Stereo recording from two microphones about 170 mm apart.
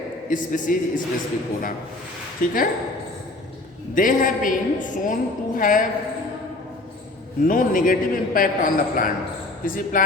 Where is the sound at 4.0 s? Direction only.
50° left (ahead or behind).